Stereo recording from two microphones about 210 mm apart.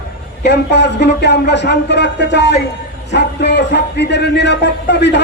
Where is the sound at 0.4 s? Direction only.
55° left (ahead or behind).